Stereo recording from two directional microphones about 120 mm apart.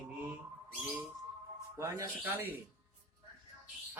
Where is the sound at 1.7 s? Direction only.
25° right (ahead or behind).